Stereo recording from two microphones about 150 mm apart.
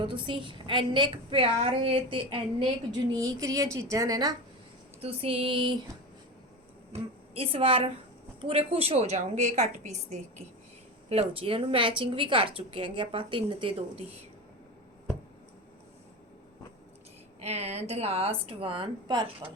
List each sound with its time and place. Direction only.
0.0 s a woman's voice: 35° right (ahead or behind)
3.2 s a woman's voice: 20° right (ahead or behind)
4.9 s a woman's voice: 40° right (ahead or behind)
6.9 s a woman's voice: 40° right (ahead or behind)
11.1 s a woman's voice: 40° right (ahead or behind)
17.4 s a woman's voice: 45° right (ahead or behind)